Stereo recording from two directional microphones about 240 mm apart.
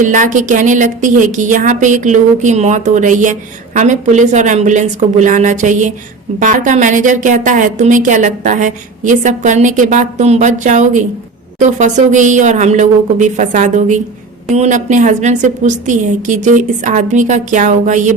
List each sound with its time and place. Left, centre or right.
0.0 s a woman's voice: right